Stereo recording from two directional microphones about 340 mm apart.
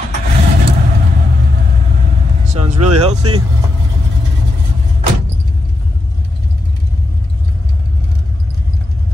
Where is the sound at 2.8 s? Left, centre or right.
Right.